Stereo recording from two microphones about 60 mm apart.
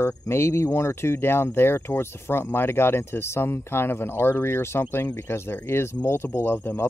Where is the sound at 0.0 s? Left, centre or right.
Left.